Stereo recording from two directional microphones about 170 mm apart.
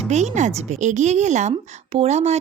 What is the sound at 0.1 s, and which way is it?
A woman's voice, 40° right (ahead or behind).